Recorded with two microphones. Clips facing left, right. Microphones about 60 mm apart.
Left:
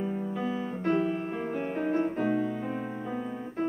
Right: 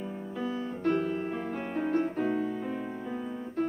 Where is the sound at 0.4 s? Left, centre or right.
Left.